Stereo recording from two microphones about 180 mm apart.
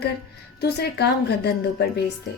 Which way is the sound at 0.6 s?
65° left (ahead or behind).